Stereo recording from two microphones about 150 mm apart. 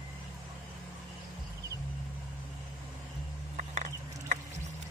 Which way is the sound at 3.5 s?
55° right (ahead or behind).